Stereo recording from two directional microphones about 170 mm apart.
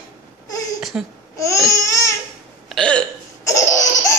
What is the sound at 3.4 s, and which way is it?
Laughter, 20° left (ahead or behind).